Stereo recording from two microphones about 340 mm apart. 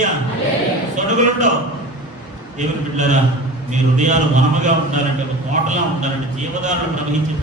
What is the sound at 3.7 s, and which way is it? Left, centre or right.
A man's voice, right.